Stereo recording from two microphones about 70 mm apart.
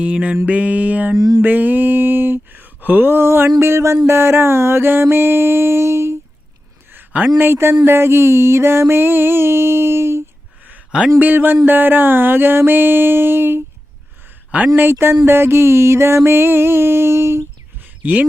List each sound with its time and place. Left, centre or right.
0.0 s mantra: centre
1.1 s music: right
1.4 s a sound: right
3.6 s music: right
6.9 s a sound: right
7.3 s music: right
10.6 s a sound: right
11.2 s music: right
14.8 s music: right